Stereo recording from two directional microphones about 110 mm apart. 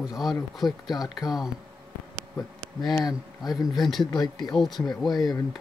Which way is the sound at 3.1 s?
5° right (ahead or behind).